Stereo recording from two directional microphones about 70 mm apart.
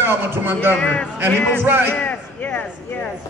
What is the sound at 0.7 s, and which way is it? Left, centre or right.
Speech, centre.